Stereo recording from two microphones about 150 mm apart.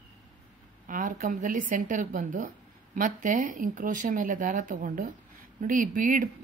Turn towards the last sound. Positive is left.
turn(degrees=-65)  # may be behind; listen again after turning